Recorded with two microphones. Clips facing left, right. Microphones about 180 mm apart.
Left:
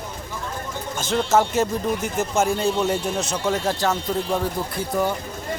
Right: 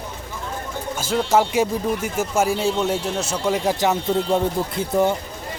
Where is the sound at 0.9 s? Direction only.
10° right (ahead or behind).